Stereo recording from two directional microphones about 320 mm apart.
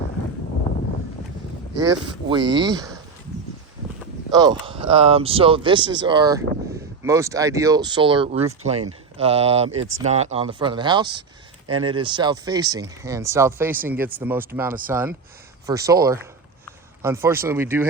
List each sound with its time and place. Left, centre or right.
2.3 s speech: centre
4.3 s speech: centre